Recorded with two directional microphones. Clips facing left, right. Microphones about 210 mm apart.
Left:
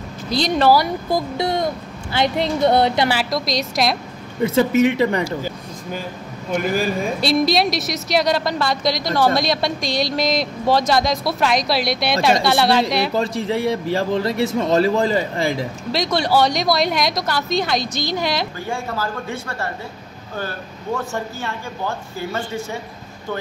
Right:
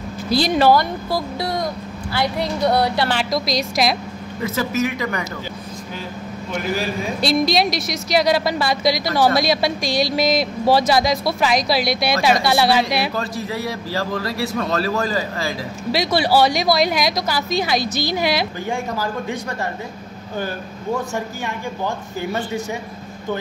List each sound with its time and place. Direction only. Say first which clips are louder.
0.3 s speech: right 1 dB; 5° right (ahead or behind)
0.7 s a man's voice: left 1 dB; 20° left (ahead or behind)
3.1 s speech: even; centre (ahead or behind)
4.4 s a man's voice: left 6 dB; 30° left (ahead or behind)
7.2 s speech: right 1 dB; centre (ahead or behind)
13.1 s a man's voice: left 5 dB; 25° left (ahead or behind)
15.9 s speech: right 1 dB; 5° right (ahead or behind)